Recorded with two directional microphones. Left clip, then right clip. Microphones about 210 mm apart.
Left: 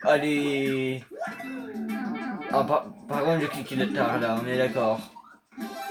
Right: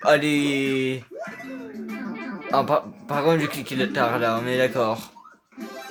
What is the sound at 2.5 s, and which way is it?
Speech, 40° right (ahead or behind).